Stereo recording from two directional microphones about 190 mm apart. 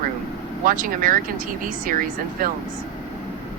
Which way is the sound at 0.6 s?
45° right (ahead or behind).